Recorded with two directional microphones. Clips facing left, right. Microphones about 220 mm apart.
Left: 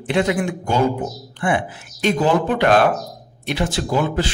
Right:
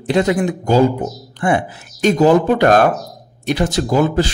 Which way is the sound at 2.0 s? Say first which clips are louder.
Right 6 dB; 40° right (ahead or behind).